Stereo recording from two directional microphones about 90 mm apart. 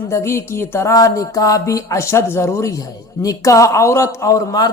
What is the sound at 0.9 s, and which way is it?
A man's voice, 40° left (ahead or behind).